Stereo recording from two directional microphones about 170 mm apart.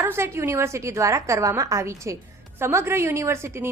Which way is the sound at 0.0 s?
15° right (ahead or behind).